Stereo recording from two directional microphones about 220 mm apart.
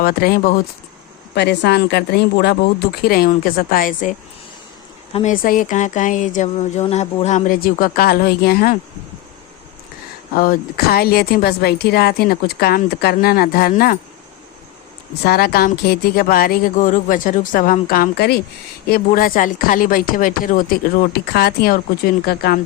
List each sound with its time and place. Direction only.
0.0 s a woman's voice: 45° left (ahead or behind)
5.1 s speech: 35° left (ahead or behind)
10.3 s a woman's voice: 40° left (ahead or behind)
15.2 s speech: 45° left (ahead or behind)